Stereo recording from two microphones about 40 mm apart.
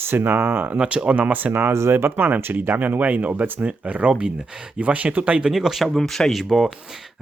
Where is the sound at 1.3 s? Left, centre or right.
Right.